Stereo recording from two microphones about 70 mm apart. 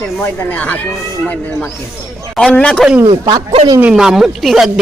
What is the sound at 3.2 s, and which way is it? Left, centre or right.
Speech, right.